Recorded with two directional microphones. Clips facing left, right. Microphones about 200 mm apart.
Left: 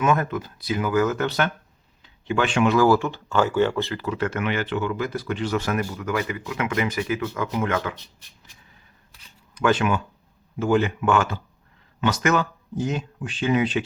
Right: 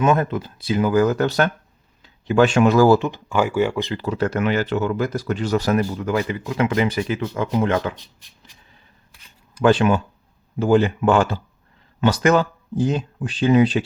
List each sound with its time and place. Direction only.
0.0 s speech: 30° right (ahead or behind)
2.9 s speech: 20° right (ahead or behind)
3.9 s speech: 35° right (ahead or behind)
9.6 s speech: 30° right (ahead or behind)